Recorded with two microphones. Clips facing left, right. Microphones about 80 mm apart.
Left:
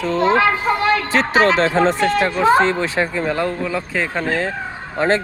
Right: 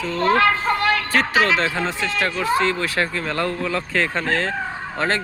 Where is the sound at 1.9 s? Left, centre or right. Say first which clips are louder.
Left 6 dB; left.